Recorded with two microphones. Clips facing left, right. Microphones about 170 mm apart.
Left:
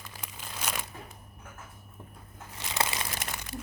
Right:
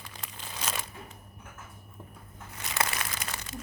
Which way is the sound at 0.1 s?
5° left (ahead or behind).